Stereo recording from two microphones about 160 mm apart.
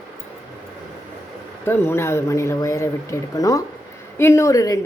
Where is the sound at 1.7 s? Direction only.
15° left (ahead or behind).